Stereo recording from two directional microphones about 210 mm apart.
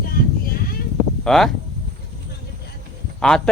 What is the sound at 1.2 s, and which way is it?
Speech, centre (ahead or behind).